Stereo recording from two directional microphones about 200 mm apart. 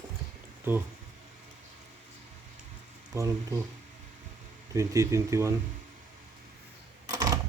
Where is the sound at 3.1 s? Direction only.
15° right (ahead or behind).